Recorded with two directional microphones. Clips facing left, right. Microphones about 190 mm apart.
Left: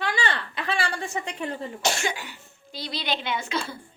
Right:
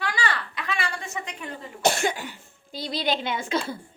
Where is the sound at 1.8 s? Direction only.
55° right (ahead or behind).